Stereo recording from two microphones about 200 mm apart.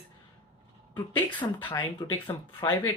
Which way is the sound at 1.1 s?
10° left (ahead or behind).